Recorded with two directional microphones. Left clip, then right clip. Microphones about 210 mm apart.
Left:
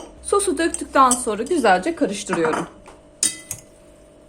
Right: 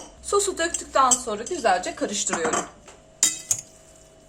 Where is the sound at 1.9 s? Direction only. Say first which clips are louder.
Left 4 dB; 25° left (ahead or behind).